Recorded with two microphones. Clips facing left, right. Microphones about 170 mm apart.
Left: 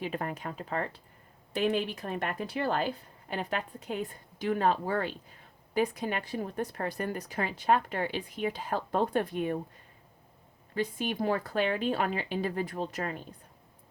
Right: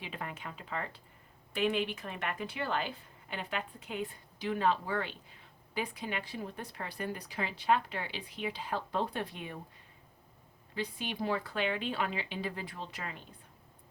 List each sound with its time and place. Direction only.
0.0 s a woman's voice: 45° left (ahead or behind)
10.8 s a woman's voice: 45° left (ahead or behind)